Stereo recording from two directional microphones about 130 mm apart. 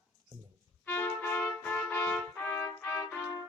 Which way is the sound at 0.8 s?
15° left (ahead or behind).